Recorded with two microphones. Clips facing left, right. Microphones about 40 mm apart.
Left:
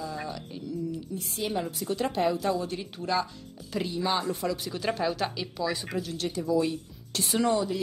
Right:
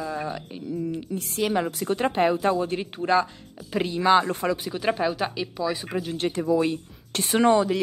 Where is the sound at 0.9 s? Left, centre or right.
Right.